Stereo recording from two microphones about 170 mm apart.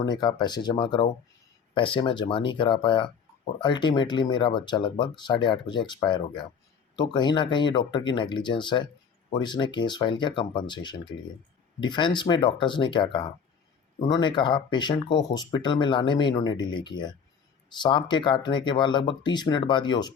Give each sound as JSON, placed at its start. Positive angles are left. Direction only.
{"t": 0.0, "sound": "speech", "side_deg": 25}